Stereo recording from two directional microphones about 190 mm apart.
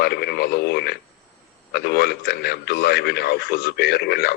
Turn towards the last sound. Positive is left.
turn(degrees=55)  # may be behind; listen again after turning